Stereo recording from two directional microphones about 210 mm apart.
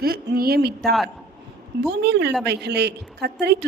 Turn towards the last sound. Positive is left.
turn(degrees=-50)  # may be behind; listen again after turning